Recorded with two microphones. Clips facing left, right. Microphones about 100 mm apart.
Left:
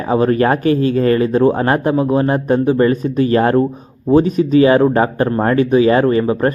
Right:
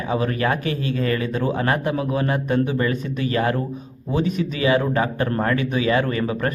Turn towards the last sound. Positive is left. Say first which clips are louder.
# left 9 dB
turn(degrees=35)  # may be behind; listen again after turning